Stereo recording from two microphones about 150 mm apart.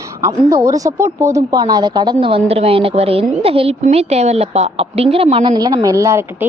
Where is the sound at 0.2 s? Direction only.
20° right (ahead or behind).